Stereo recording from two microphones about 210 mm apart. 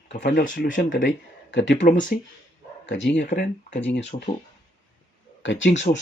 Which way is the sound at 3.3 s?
40° left (ahead or behind).